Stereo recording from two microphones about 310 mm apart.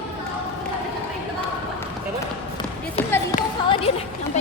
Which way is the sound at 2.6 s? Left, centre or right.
Centre.